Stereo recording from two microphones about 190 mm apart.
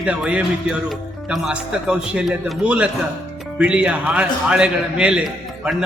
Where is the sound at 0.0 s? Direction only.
5° right (ahead or behind).